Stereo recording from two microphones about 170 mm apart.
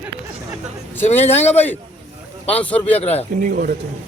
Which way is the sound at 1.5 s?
10° left (ahead or behind).